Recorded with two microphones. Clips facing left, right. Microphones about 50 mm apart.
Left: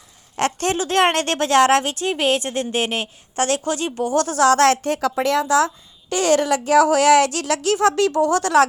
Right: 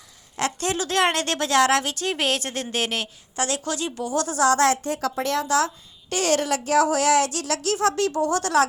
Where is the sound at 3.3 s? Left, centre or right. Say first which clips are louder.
Left 6 dB; left.